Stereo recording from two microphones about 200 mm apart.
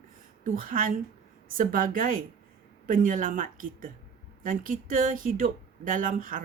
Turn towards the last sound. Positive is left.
turn(degrees=-40)  # may be behind; listen again after turning